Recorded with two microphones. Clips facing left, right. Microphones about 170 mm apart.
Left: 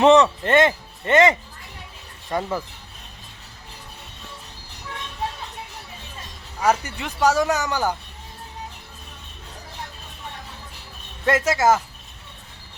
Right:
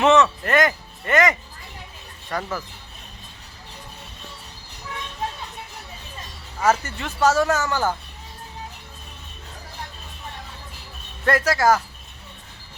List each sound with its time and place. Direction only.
0.0 s speech: 30° left (ahead or behind)
6.6 s speech: 15° left (ahead or behind)
11.3 s speech: 20° left (ahead or behind)